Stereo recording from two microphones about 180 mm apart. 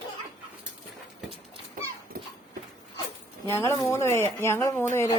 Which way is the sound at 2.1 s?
55° right (ahead or behind).